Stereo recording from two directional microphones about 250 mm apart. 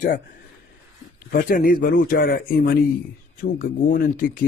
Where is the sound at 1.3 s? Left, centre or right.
Left.